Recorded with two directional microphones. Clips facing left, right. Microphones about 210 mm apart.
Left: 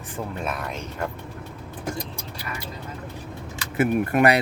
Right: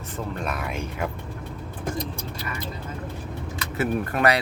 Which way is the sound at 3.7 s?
15° left (ahead or behind).